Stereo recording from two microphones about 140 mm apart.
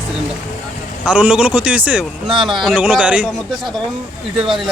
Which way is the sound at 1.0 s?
10° right (ahead or behind).